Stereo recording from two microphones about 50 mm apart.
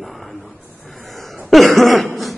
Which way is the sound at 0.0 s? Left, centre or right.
Centre.